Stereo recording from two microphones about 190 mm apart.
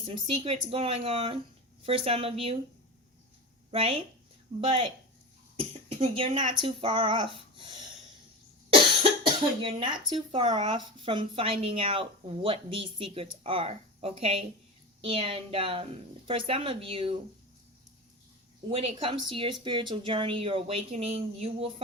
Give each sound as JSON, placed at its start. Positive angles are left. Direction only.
{"t": 0.0, "sound": "speech", "side_deg": -30}
{"t": 3.7, "sound": "a woman's voice", "side_deg": -30}
{"t": 9.6, "sound": "speech", "side_deg": -25}
{"t": 18.7, "sound": "speech", "side_deg": -30}